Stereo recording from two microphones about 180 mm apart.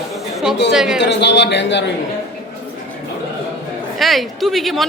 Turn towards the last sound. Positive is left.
turn(degrees=0)  # may be behind; listen again after turning